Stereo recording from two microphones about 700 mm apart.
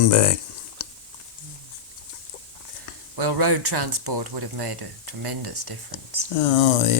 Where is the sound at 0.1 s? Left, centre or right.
Left.